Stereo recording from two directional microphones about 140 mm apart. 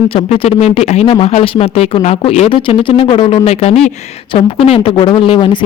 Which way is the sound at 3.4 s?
50° left (ahead or behind).